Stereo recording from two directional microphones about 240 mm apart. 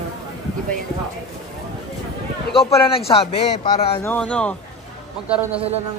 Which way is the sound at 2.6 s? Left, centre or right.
Left.